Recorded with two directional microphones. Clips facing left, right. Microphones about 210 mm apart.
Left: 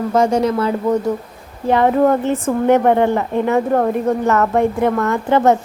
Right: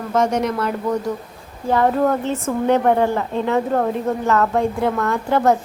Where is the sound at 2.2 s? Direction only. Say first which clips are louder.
Left 4 dB; 15° left (ahead or behind).